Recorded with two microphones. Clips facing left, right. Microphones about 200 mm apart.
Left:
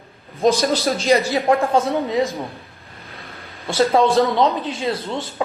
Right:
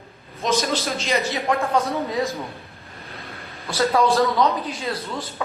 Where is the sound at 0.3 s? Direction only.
30° left (ahead or behind).